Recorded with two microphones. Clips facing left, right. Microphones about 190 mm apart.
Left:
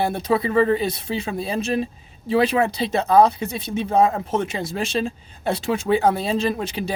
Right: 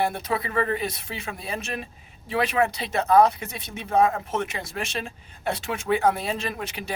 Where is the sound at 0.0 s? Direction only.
30° left (ahead or behind).